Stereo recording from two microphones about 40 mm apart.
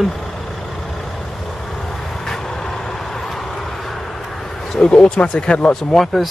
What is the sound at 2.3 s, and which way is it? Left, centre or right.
Vehicle, centre.